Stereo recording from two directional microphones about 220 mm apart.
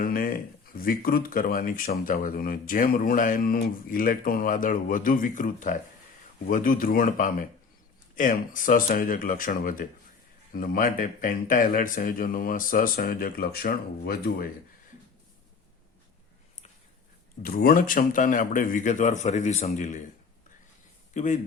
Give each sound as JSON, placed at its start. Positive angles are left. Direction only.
{"t": 0.0, "sound": "speech", "side_deg": 40}
{"t": 17.4, "sound": "speech", "side_deg": 40}
{"t": 21.1, "sound": "speech", "side_deg": 35}